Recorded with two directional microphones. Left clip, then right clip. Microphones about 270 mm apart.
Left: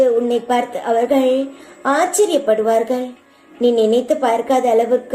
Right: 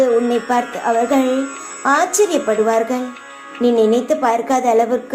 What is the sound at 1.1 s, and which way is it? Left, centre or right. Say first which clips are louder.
A woman's voice: left 1 dB; centre.